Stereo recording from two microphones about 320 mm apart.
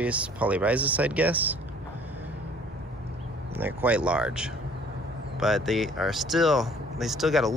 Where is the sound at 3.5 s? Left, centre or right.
Centre.